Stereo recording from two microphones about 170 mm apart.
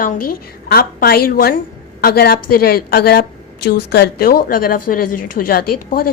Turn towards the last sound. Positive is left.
turn(degrees=60)  # may be behind; listen again after turning